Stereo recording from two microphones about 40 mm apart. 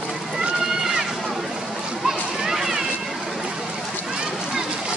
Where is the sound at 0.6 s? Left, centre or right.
Centre.